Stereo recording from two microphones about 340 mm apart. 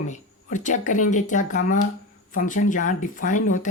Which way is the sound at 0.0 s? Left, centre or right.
Left.